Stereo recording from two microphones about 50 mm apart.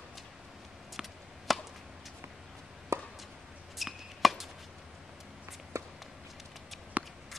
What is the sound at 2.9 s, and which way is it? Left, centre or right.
Chop, right.